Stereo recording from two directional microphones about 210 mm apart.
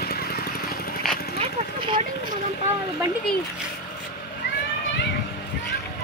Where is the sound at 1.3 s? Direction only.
25° right (ahead or behind).